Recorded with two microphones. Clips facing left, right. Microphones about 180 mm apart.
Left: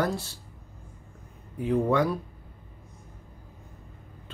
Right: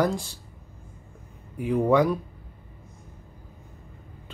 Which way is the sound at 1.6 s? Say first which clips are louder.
Right 3 dB; 10° right (ahead or behind).